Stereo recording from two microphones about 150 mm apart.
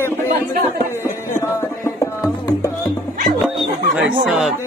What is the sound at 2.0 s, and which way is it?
Music, 20° left (ahead or behind).